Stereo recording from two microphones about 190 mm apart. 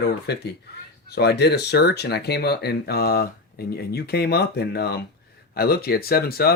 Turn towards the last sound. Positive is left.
turn(degrees=55)  # may be behind; listen again after turning